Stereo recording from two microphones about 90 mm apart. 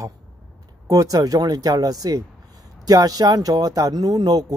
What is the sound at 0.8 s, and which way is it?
Speech, 40° right (ahead or behind).